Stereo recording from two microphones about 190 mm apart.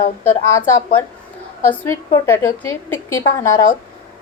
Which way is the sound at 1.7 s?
15° left (ahead or behind).